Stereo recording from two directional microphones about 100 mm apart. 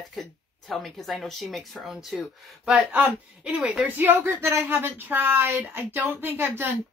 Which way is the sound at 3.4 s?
10° right (ahead or behind).